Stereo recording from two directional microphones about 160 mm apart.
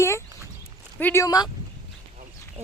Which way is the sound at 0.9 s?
15° left (ahead or behind).